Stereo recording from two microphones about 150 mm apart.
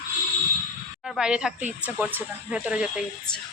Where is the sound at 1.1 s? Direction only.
5° right (ahead or behind).